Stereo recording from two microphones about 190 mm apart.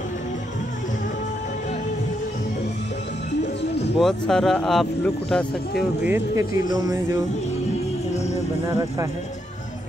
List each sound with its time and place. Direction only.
4.0 s speech: centre (ahead or behind)
5.8 s speech: 10° right (ahead or behind)
8.6 s speech: 15° right (ahead or behind)